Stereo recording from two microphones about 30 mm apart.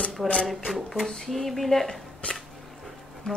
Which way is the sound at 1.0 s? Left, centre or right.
Centre.